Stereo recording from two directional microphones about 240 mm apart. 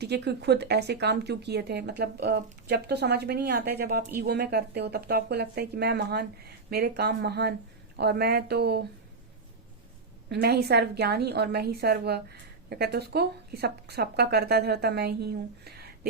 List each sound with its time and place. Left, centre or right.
0.0 s a woman's voice: right
10.2 s a woman's voice: right